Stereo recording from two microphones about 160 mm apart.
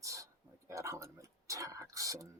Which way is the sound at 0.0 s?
20° right (ahead or behind).